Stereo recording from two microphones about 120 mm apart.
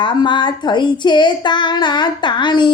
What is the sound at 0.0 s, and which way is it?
Child singing, 40° left (ahead or behind).